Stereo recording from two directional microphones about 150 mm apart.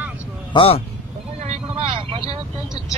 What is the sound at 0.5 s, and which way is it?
Speech, 40° left (ahead or behind).